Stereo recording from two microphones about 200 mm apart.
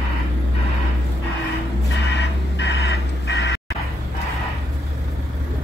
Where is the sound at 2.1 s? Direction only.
60° left (ahead or behind).